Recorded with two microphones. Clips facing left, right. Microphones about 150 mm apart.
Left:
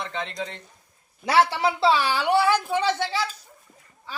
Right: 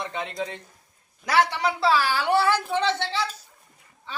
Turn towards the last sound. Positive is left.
turn(degrees=10)  # may be behind; listen again after turning